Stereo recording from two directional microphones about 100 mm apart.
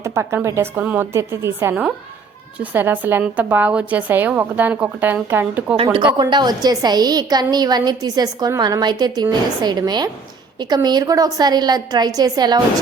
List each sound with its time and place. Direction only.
0.0 s a woman's voice: 30° right (ahead or behind)
0.8 s a woman's voice: 15° right (ahead or behind)
1.1 s a woman's voice: 25° right (ahead or behind)
5.7 s speech: 65° right (ahead or behind)
6.1 s a woman's voice: 45° right (ahead or behind)